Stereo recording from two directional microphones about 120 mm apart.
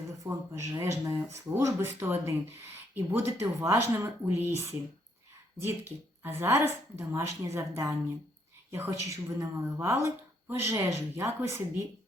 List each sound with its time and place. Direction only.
0.2 s speech: 25° right (ahead or behind)